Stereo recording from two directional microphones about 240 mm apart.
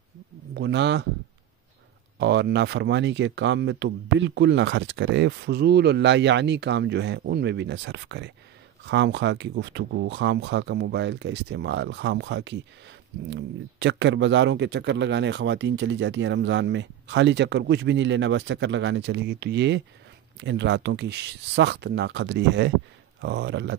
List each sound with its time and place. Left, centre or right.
0.6 s speech: right
2.1 s speech: right